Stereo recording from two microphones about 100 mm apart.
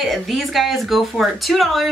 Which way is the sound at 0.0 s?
Centre (ahead or behind).